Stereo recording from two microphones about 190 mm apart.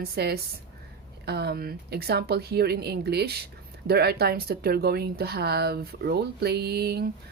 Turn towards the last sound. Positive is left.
turn(degrees=-60)  # may be behind; listen again after turning